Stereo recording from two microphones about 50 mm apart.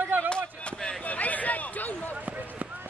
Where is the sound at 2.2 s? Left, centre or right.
Right.